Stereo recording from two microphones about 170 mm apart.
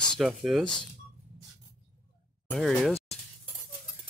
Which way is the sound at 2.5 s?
Centre (ahead or behind).